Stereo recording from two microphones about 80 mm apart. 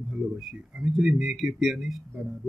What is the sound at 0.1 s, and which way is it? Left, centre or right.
A man's voice, centre.